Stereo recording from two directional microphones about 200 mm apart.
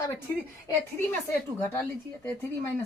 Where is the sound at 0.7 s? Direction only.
10° left (ahead or behind).